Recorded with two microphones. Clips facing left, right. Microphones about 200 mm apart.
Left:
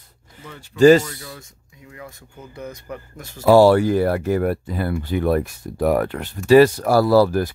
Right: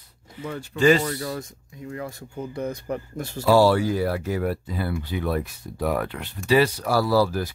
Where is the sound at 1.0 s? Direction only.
50° right (ahead or behind).